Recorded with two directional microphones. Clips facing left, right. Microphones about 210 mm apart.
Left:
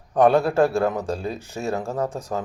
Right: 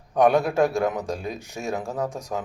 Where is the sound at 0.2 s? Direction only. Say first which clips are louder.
Left 2 dB; 15° right (ahead or behind).